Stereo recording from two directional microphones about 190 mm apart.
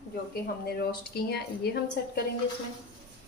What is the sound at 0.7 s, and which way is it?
A woman's voice, 55° left (ahead or behind).